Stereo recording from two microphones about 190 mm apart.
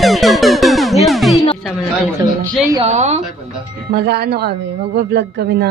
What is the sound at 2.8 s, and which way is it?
Speech, 35° right (ahead or behind).